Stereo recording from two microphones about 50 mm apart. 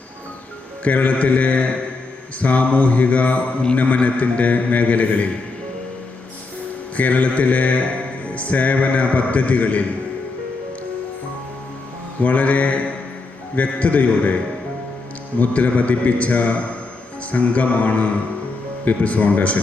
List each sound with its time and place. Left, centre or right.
0.9 s music: left
6.9 s music: left
12.2 s music: left
15.4 s music: left